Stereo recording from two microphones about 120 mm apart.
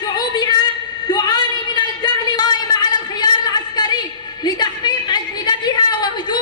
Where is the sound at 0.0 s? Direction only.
35° left (ahead or behind).